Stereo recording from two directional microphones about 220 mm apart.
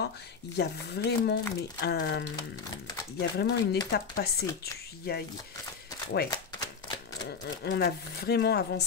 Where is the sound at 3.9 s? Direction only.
45° left (ahead or behind).